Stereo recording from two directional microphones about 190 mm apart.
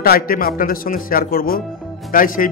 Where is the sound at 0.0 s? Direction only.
50° left (ahead or behind).